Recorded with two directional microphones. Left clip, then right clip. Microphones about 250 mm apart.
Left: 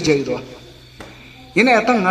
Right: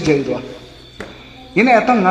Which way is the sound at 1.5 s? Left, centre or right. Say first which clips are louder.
Right 2 dB; left.